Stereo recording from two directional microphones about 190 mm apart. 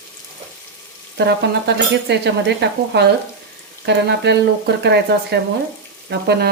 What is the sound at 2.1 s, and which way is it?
Speech, 65° right (ahead or behind).